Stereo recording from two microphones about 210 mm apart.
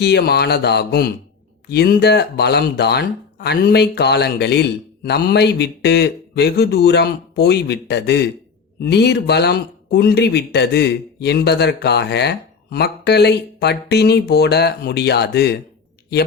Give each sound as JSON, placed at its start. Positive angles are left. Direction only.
{"t": 0.0, "sound": "speech", "side_deg": 50}